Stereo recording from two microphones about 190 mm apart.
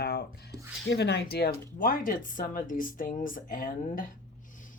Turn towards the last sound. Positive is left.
turn(degrees=45)  # may be behind; listen again after turning